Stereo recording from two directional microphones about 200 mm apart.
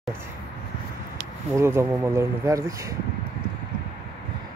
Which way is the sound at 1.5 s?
15° right (ahead or behind).